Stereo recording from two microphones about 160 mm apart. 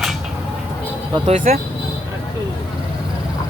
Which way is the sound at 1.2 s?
55° right (ahead or behind).